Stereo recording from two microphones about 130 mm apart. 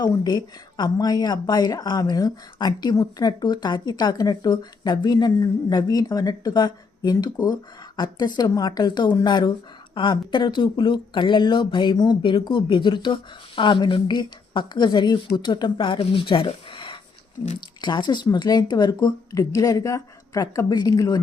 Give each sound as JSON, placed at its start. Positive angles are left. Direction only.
{"t": 0.0, "sound": "a woman's voice", "side_deg": 30}